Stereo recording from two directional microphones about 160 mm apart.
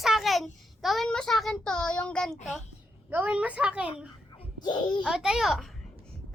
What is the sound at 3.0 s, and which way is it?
Speech, 10° right (ahead or behind).